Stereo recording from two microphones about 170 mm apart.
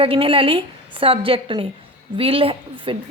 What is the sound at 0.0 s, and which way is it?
Speech, 30° right (ahead or behind).